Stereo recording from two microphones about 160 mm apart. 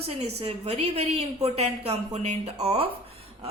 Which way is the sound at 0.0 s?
40° right (ahead or behind).